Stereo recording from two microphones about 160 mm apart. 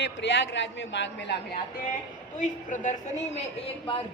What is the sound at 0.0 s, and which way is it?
A man's voice, 90° left.